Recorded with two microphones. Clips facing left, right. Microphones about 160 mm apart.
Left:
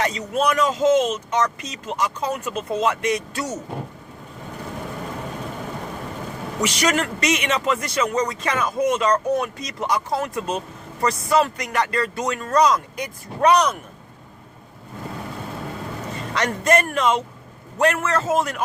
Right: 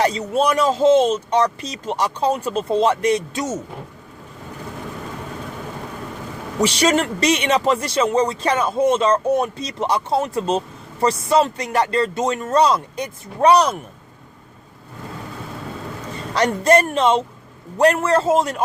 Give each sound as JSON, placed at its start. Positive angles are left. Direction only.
{"t": 0.0, "sound": "speech", "side_deg": -35}
{"t": 6.6, "sound": "speech", "side_deg": -30}
{"t": 16.3, "sound": "speech", "side_deg": -35}